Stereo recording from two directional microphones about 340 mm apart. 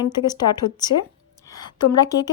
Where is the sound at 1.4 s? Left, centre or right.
Centre.